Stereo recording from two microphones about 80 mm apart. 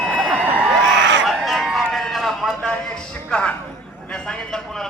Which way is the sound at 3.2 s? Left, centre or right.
Centre.